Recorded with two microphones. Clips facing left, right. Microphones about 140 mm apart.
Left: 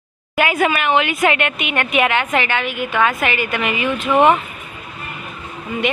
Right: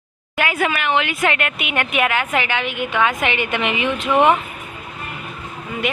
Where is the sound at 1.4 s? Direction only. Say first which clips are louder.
Left 2 dB; 5° right (ahead or behind); by 4.0 s 20° right (ahead or behind).